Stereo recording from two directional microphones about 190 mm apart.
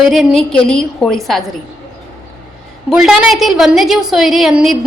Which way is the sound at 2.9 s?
5° right (ahead or behind).